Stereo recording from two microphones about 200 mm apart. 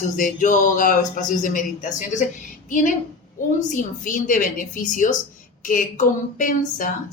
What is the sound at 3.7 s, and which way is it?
Speech, 40° left (ahead or behind).